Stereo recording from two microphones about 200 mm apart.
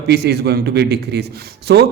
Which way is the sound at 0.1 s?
55° right (ahead or behind).